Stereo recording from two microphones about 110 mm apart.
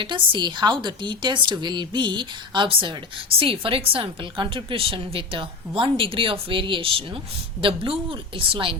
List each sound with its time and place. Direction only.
0.0 s a woman's voice: 45° right (ahead or behind)